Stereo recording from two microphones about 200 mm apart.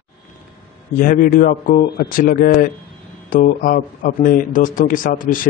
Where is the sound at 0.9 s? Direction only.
45° left (ahead or behind).